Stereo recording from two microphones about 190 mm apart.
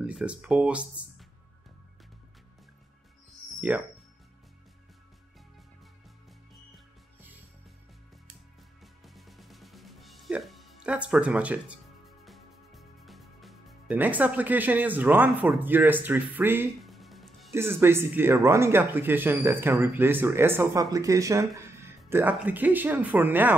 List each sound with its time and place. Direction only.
0.0 s speech: 5° right (ahead or behind)
8.8 s music: centre (ahead or behind)
12.3 s speech: centre (ahead or behind)
16.7 s music: centre (ahead or behind)
17.5 s speech: 10° right (ahead or behind)